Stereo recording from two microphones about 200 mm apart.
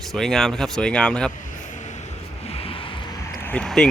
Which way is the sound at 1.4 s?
40° left (ahead or behind).